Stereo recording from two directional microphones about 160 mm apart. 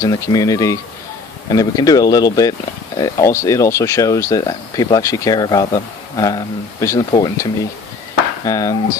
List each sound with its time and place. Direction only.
0.0 s speech: 20° left (ahead or behind)
8.5 s speech: 20° left (ahead or behind)